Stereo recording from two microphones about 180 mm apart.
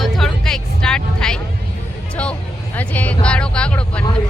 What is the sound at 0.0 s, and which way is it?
Music, centre (ahead or behind).